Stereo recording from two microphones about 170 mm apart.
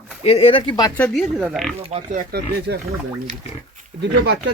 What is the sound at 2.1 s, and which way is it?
Speech, 65° right (ahead or behind).